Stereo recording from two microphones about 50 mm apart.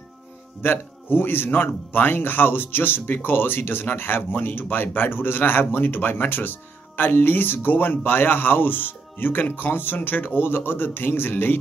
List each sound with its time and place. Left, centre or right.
0.6 s speech: left